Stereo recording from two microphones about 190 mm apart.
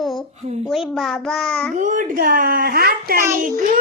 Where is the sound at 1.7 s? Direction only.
40° right (ahead or behind).